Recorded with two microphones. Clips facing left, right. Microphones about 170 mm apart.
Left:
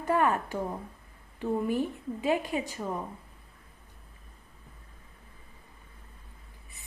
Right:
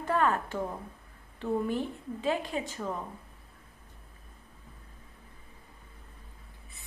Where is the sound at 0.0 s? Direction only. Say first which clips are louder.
Left 2 dB; 20° left (ahead or behind).